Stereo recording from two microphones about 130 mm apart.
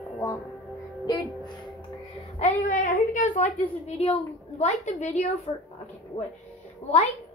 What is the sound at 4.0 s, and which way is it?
A woman's voice, 55° left (ahead or behind).